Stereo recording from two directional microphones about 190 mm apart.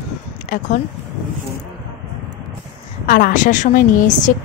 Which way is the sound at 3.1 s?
45° left (ahead or behind).